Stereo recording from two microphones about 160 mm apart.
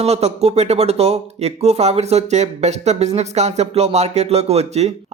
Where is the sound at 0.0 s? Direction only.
40° right (ahead or behind).